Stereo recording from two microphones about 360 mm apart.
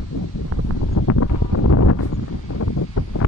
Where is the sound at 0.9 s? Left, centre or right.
Left.